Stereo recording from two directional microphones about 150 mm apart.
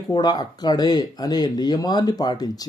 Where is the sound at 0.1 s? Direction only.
25° left (ahead or behind).